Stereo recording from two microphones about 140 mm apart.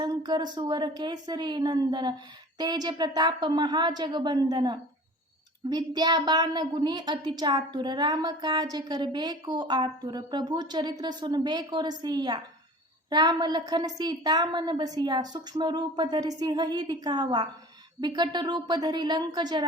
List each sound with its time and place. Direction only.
0.0 s a woman's voice: 30° right (ahead or behind)